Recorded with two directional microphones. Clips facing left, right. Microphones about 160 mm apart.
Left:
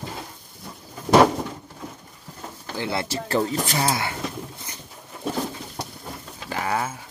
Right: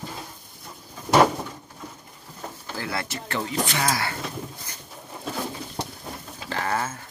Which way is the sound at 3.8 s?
20° left (ahead or behind).